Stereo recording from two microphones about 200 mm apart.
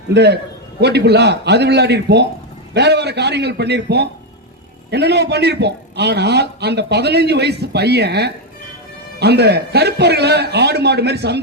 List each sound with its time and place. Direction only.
0.1 s a man's voice: 55° right (ahead or behind)